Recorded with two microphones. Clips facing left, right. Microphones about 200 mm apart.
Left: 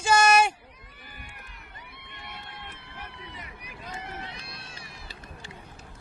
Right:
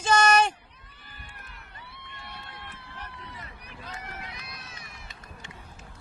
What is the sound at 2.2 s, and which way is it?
Crowd, 20° left (ahead or behind).